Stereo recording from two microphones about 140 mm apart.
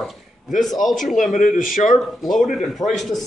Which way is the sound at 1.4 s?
70° left (ahead or behind).